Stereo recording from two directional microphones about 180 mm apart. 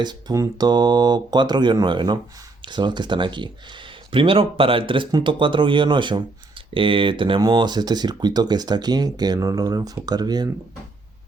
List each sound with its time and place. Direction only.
0.0 s speech: 25° right (ahead or behind)